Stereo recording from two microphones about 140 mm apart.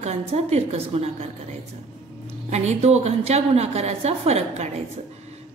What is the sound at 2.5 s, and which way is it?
A woman's voice, 50° right (ahead or behind).